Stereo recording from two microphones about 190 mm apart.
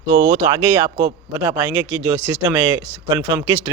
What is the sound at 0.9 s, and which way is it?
Speech, 40° right (ahead or behind).